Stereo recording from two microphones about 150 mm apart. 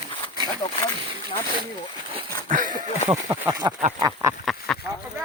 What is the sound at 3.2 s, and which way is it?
Speech, 25° right (ahead or behind).